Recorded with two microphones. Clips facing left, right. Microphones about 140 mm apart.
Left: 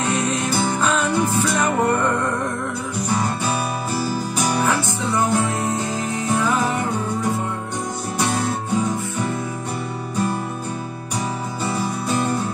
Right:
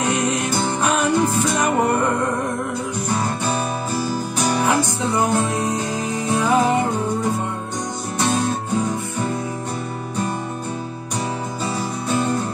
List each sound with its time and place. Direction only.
0.1 s music: 15° right (ahead or behind)
4.6 s music: 15° right (ahead or behind)